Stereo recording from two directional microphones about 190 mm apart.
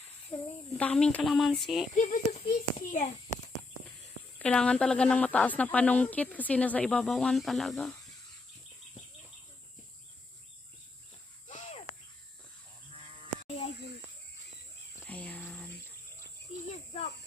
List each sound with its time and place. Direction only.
0.3 s speech: 10° left (ahead or behind)
2.0 s a child's voice: 40° left (ahead or behind)
4.4 s speech: 5° left (ahead or behind)
11.4 s cricket: 40° left (ahead or behind)
15.0 s a sound: 10° left (ahead or behind)
16.7 s a sound: 35° left (ahead or behind)